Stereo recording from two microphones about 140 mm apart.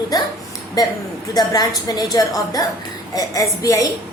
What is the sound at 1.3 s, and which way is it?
A woman's voice, 30° left (ahead or behind).